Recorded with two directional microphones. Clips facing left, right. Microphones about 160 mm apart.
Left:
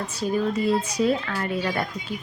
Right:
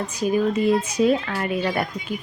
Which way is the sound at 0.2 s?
20° right (ahead or behind).